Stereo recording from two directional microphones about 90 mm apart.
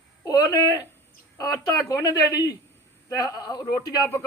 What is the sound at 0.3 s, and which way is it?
A man's voice, 45° left (ahead or behind).